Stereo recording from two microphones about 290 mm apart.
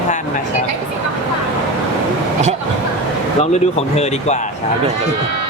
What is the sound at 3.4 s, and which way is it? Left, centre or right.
Speech, left.